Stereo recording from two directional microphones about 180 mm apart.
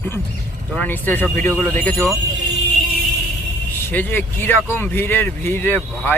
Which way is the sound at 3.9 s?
10° left (ahead or behind).